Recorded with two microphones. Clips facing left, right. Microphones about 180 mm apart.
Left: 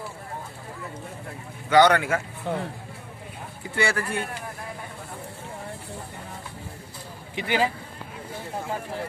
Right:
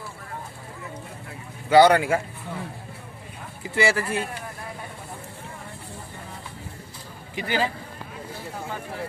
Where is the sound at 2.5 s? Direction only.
70° left (ahead or behind).